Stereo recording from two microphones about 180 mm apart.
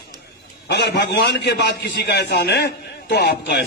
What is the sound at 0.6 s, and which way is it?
A man's voice, 75° left (ahead or behind).